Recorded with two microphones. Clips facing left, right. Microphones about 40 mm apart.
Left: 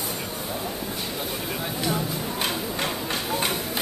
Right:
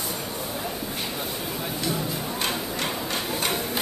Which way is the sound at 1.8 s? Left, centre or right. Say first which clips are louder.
Left 2 dB; centre.